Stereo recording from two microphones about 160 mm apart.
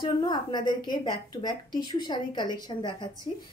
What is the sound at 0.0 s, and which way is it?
A woman's voice, 25° left (ahead or behind).